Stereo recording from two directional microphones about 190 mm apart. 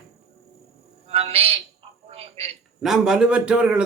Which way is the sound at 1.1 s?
35° right (ahead or behind).